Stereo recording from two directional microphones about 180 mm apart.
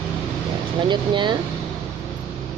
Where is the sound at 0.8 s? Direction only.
25° right (ahead or behind).